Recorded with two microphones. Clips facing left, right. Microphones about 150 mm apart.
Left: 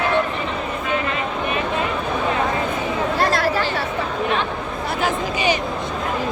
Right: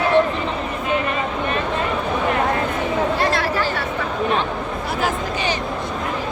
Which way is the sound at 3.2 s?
40° left (ahead or behind).